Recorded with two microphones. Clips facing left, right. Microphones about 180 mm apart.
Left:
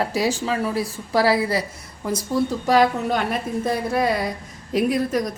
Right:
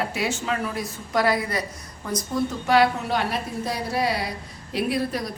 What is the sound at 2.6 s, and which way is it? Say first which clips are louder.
A woman's voice: left 1 dB; 40° left (ahead or behind).